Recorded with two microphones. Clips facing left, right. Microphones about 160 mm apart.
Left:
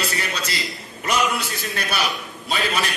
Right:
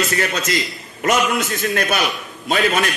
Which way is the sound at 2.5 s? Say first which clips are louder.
Right 6 dB; 50° right (ahead or behind).